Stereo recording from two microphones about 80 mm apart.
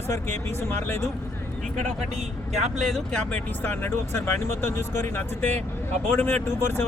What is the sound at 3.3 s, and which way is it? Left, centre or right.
Speech, left.